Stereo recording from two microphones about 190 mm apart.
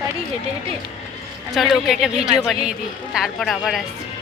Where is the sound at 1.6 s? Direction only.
Centre (ahead or behind).